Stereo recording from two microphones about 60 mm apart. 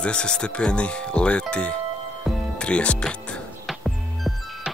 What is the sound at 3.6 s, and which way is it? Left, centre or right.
Music, centre.